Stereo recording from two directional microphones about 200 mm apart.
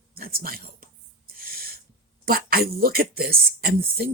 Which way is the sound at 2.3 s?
50° right (ahead or behind).